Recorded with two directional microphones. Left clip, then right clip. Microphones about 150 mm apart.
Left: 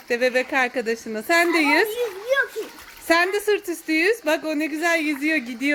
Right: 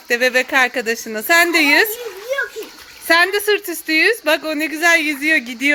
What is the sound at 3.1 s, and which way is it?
Speech, centre (ahead or behind).